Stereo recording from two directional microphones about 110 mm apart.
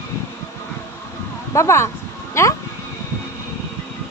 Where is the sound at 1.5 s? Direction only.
25° left (ahead or behind).